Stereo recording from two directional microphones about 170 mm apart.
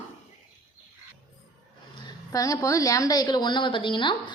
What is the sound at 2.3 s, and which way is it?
A woman's voice, 20° left (ahead or behind).